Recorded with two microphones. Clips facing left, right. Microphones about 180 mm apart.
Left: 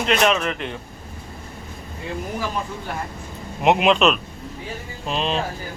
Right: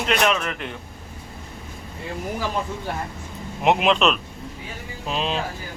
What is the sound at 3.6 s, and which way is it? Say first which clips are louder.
A man's voice: left 2 dB; centre (ahead or behind).